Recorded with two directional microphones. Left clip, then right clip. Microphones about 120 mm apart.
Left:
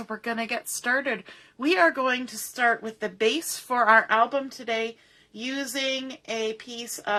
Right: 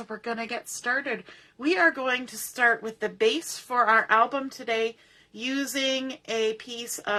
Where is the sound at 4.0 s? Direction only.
15° left (ahead or behind).